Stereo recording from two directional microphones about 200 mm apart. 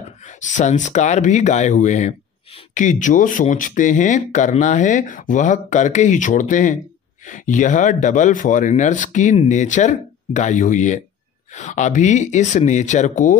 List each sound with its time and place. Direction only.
0.2 s speech: 40° left (ahead or behind)